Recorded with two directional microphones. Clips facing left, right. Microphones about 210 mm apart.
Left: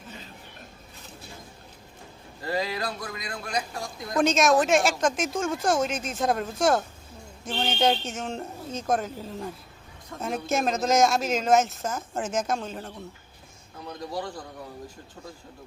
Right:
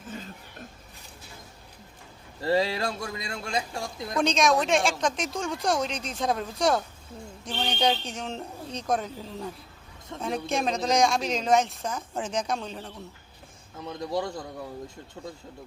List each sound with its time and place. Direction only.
2.4 s a man's voice: 30° right (ahead or behind)
4.2 s speech: 5° left (ahead or behind)
14.0 s a man's voice: 25° right (ahead or behind)